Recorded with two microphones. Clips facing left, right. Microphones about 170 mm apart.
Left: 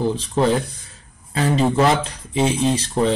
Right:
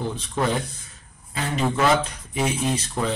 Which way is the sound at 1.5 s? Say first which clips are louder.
Left 3 dB; 30° left (ahead or behind).